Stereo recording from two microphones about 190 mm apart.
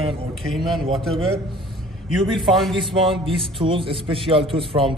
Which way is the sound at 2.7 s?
25° right (ahead or behind).